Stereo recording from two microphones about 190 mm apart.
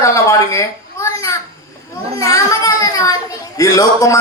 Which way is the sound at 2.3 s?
15° left (ahead or behind).